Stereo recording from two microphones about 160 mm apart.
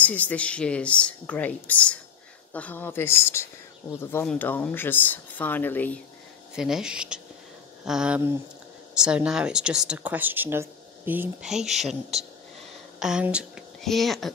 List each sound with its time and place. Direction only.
0.0 s speech: 10° left (ahead or behind)
6.5 s speech: 5° right (ahead or behind)
13.0 s speech: 5° right (ahead or behind)